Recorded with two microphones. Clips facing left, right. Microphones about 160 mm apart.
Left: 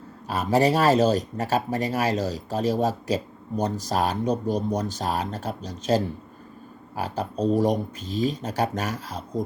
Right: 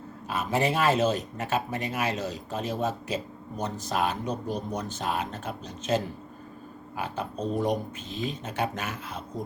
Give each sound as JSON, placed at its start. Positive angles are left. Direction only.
{"t": 0.3, "sound": "speech", "side_deg": 35}